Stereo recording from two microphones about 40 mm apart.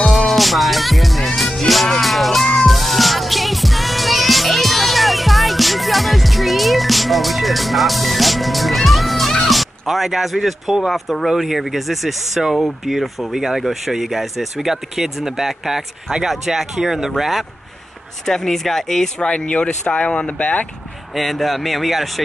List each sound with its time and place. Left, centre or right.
0.0 s music: centre
12.5 s speech: centre
18.2 s speech: centre
19.1 s speech: left
21.1 s speech: centre